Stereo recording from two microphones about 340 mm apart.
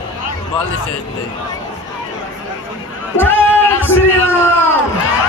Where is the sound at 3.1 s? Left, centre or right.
Centre.